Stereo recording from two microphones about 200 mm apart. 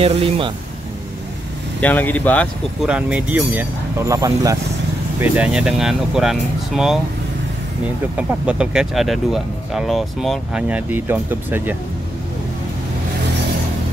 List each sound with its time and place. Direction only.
0.0 s speech: 30° right (ahead or behind)
1.8 s speech: 10° left (ahead or behind)
8.2 s speech: 5° right (ahead or behind)